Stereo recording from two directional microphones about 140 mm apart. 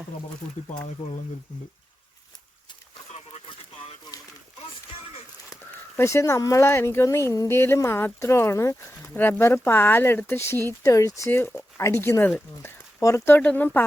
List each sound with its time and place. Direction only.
6.0 s speech: 20° left (ahead or behind)